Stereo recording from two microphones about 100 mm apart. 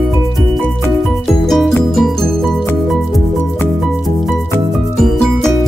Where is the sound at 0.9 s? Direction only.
Centre (ahead or behind).